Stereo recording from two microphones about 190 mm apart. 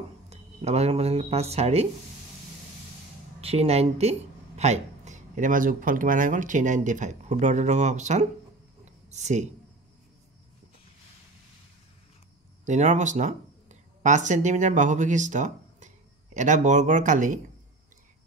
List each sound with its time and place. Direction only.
0.3 s speech: 35° right (ahead or behind)
3.3 s speech: 35° right (ahead or behind)
12.6 s speech: 40° right (ahead or behind)